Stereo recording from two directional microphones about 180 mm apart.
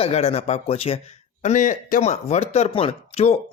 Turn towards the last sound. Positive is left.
turn(degrees=35)  # may be behind; listen again after turning